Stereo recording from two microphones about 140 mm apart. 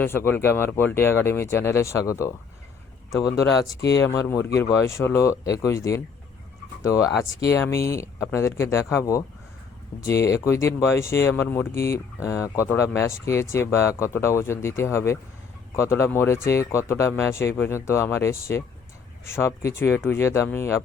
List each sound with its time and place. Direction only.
0.0 s speech: 15° left (ahead or behind)
7.5 s speech: 20° left (ahead or behind)